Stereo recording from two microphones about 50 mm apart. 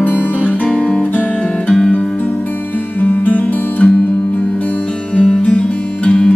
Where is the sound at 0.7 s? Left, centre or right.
Centre.